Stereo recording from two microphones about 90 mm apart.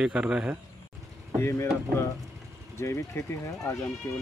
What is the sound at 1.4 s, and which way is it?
Speech, 30° left (ahead or behind).